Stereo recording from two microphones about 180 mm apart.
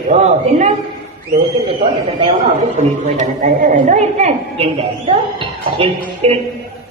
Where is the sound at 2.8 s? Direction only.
40° right (ahead or behind).